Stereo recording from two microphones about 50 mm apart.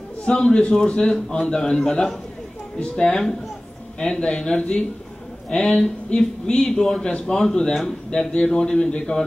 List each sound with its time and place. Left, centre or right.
0.2 s a man's voice: centre